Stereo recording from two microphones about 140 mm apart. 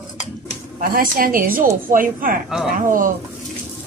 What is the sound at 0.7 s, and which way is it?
Speech, 90° right.